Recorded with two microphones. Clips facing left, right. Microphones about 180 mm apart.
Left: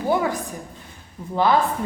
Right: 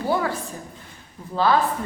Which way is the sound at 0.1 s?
15° left (ahead or behind).